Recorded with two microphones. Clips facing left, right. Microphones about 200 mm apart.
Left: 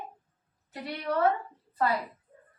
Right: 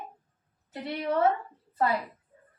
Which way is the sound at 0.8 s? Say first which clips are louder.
Right 2 dB; 25° right (ahead or behind).